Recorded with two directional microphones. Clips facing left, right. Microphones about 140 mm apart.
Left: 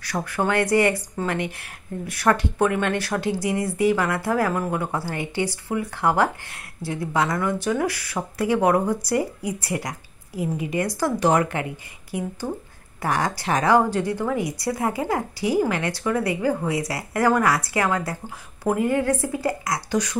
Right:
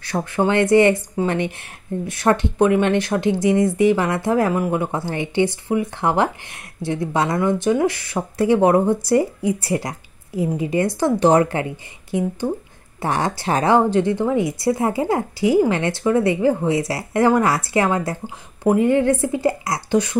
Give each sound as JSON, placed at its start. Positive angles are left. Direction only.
{"t": 0.0, "sound": "speech", "side_deg": -25}